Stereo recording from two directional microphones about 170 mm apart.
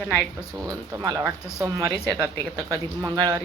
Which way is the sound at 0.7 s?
20° right (ahead or behind).